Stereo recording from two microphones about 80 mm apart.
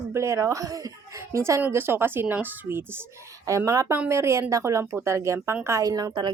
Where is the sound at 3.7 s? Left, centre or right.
Right.